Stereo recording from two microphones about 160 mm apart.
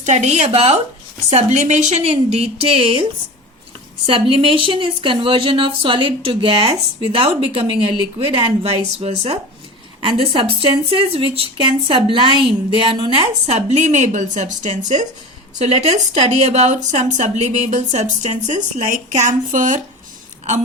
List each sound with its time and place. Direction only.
0.0 s a woman's voice: 45° right (ahead or behind)